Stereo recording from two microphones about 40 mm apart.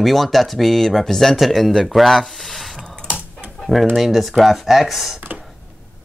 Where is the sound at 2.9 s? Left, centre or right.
Right.